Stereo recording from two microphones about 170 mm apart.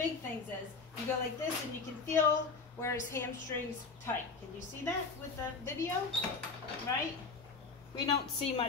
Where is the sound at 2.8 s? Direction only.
15° left (ahead or behind).